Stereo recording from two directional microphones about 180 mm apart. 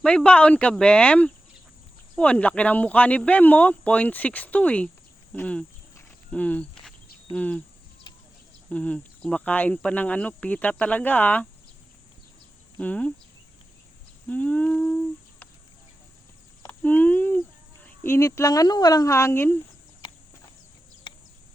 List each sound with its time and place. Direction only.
0.0 s speech: 5° left (ahead or behind)
5.3 s cricket: 5° left (ahead or behind)
7.3 s speech: 5° left (ahead or behind)
8.7 s speech: 5° left (ahead or behind)
12.8 s speech: 10° left (ahead or behind)
14.3 s speech: 10° left (ahead or behind)
16.6 s a sound: 10° left (ahead or behind)
17.8 s speech: 15° left (ahead or behind)
21.1 s a sound: 25° left (ahead or behind)